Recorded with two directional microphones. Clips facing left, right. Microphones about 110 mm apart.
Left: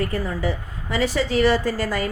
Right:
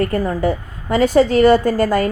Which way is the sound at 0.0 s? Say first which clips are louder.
Right 7 dB; 50° right (ahead or behind).